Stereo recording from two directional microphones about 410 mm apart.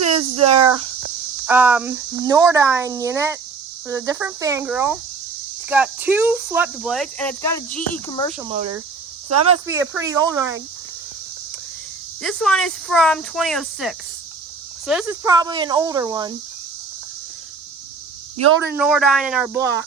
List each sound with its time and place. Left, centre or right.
0.0 s a sound: right
0.3 s a sound: centre
1.5 s a child's voice: centre
8.4 s a child's voice: centre
9.3 s speech: right
9.6 s a child's voice: centre
12.2 s a child's voice: centre
18.3 s speech: right
18.8 s speech: centre